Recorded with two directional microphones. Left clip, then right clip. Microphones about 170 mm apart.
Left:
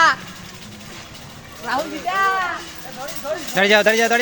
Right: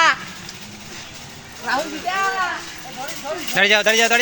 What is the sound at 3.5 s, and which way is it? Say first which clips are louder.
Speech: left 1 dB; 10° left (ahead or behind).